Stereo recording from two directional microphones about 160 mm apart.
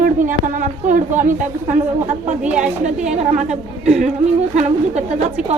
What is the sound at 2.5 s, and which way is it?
Speech, 5° right (ahead or behind).